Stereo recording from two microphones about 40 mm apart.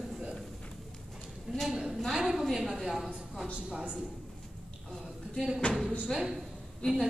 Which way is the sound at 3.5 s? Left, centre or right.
Right.